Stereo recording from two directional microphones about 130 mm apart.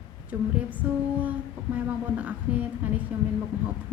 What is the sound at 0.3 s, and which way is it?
Speech, 15° right (ahead or behind).